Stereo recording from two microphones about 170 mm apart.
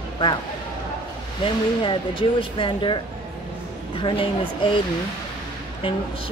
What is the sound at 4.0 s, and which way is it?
Speech, 30° left (ahead or behind).